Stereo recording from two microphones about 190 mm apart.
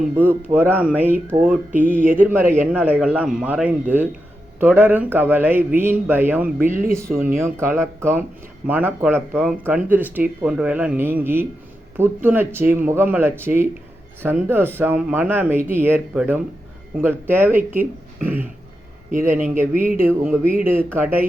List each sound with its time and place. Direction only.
0.2 s speech: 10° right (ahead or behind)
19.1 s speech: 45° right (ahead or behind)
19.5 s speech: 10° right (ahead or behind)